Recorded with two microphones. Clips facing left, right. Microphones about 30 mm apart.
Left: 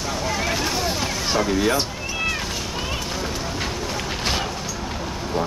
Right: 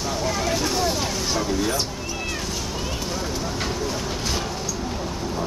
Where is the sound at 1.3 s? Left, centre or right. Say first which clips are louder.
Left 5 dB; left.